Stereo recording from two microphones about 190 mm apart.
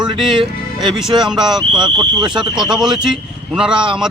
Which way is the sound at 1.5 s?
20° right (ahead or behind).